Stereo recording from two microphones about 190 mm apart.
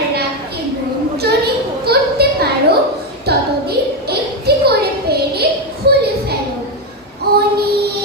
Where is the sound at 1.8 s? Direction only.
55° right (ahead or behind).